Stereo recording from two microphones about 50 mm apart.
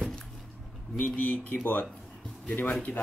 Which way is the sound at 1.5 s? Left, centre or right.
Left.